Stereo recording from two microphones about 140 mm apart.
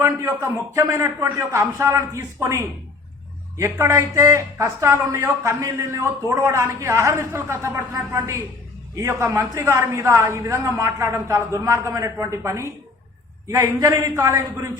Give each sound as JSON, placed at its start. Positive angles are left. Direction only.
{"t": 0.0, "sound": "speech", "side_deg": -20}